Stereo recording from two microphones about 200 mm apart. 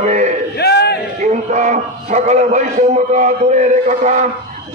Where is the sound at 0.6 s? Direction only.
55° left (ahead or behind).